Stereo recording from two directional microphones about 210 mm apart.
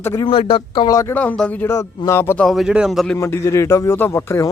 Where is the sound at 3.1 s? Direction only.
15° left (ahead or behind).